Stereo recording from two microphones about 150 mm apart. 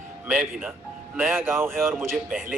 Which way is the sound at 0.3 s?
15° right (ahead or behind).